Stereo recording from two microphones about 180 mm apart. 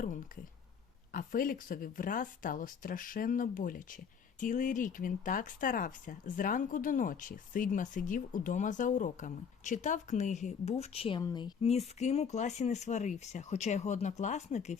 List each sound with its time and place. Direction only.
1.1 s speech: 50° left (ahead or behind); by 11.2 s 30° left (ahead or behind)
11.2 s speech: 20° left (ahead or behind)
11.6 s speech: 35° left (ahead or behind)